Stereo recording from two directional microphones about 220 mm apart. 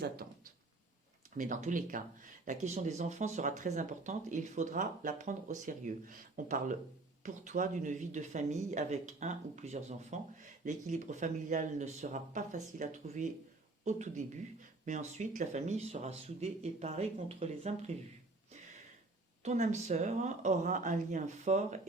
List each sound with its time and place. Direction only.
1.4 s speech: 35° right (ahead or behind)
19.4 s speech: 30° right (ahead or behind)